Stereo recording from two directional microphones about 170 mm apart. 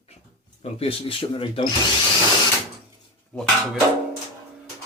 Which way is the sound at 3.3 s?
5° left (ahead or behind).